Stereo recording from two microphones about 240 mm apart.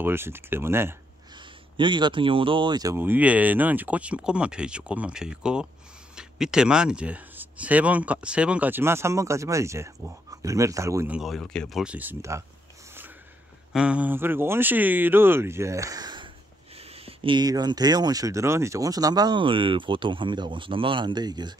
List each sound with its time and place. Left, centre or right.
0.0 s speech: centre
13.7 s speech: centre